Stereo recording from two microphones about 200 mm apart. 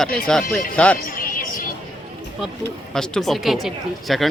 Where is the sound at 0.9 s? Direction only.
45° left (ahead or behind).